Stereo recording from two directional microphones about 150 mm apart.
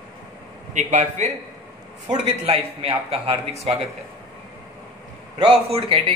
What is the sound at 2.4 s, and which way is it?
Speech, 45° right (ahead or behind).